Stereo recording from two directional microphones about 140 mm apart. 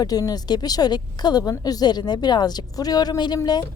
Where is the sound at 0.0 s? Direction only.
25° left (ahead or behind).